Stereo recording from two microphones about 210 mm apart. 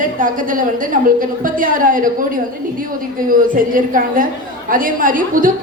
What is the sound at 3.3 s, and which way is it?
A woman's voice, 40° right (ahead or behind).